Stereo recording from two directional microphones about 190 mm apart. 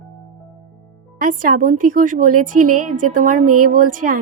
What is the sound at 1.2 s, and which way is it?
A woman's voice, 45° right (ahead or behind).